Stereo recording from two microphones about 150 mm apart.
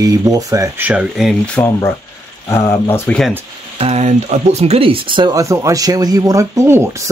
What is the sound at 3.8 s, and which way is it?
Speech, 45° right (ahead or behind).